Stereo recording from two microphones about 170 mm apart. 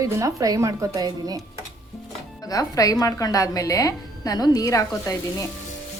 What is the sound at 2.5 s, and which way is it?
A woman's voice, 20° left (ahead or behind).